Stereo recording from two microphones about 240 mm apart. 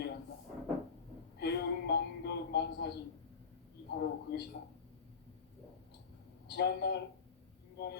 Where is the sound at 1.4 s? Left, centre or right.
Left.